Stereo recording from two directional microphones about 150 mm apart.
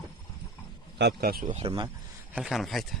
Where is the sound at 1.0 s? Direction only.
90° right.